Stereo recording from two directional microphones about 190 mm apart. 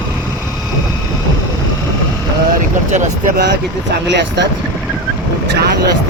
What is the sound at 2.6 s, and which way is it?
Speech, 40° right (ahead or behind).